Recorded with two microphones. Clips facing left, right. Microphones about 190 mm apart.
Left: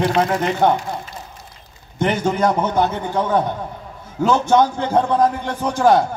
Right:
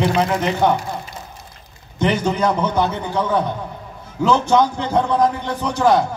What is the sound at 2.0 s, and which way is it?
A man's voice, 50° left (ahead or behind).